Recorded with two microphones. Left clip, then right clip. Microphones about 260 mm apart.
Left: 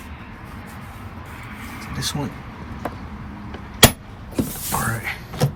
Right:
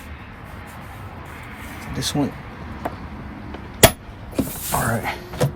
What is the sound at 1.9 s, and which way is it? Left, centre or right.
Speech, centre.